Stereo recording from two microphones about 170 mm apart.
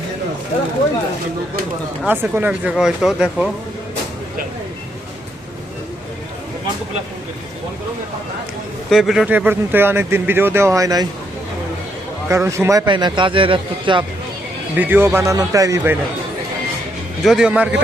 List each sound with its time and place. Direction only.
2.0 s speech: 10° right (ahead or behind)
8.9 s speech: centre (ahead or behind); by 11.0 s 20° right (ahead or behind)
12.3 s a man's voice: 15° right (ahead or behind)
14.8 s speech: 10° right (ahead or behind)
17.2 s speech: 5° right (ahead or behind)